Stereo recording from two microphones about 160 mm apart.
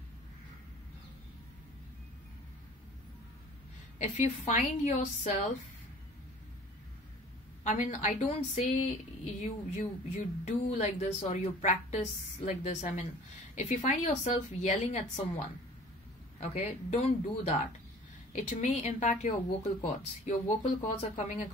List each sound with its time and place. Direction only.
4.0 s speech: 50° left (ahead or behind)
7.6 s speech: 50° left (ahead or behind)